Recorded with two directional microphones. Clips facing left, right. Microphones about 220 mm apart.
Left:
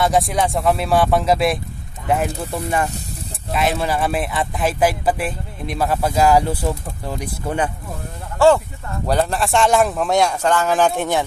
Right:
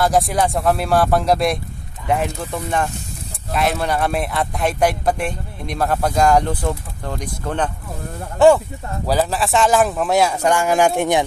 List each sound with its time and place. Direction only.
0.0 s speech: centre (ahead or behind)
8.4 s speech: 20° right (ahead or behind)
9.0 s speech: centre (ahead or behind)